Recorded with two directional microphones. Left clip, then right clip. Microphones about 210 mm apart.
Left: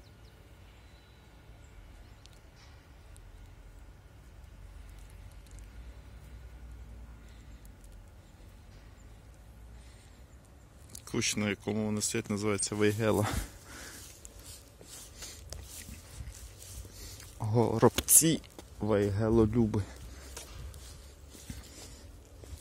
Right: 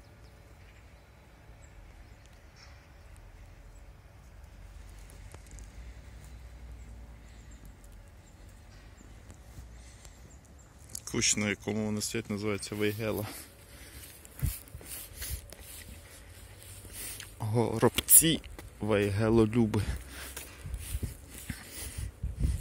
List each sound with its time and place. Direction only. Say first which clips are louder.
10.9 s speech: right 3 dB; 5° left (ahead or behind)
12.8 s speech: left 4 dB; 25° left (ahead or behind)
13.1 s speech: left 6 dB; 45° left (ahead or behind)
15.5 s a sound: left 1 dB; 25° left (ahead or behind)
17.4 s a sound: left 2 dB; 15° left (ahead or behind)
18.6 s speech: even; 5° left (ahead or behind)